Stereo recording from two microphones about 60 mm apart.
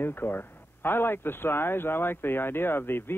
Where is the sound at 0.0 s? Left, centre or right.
Left.